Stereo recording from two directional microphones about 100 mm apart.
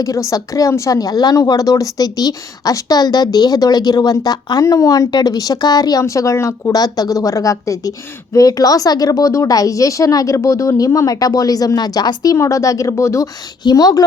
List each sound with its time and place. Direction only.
0.0 s speech: 35° left (ahead or behind)